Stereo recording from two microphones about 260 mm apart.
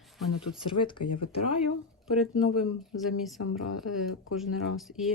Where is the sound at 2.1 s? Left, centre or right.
Centre.